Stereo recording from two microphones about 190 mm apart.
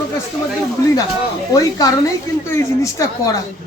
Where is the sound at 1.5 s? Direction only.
20° left (ahead or behind).